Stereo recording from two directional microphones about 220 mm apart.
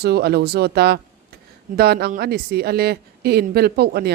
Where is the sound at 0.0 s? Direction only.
45° right (ahead or behind).